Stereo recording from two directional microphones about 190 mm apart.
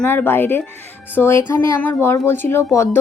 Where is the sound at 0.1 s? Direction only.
10° left (ahead or behind).